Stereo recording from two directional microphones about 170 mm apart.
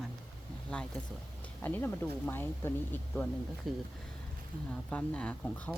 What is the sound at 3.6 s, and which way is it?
Speech, centre (ahead or behind).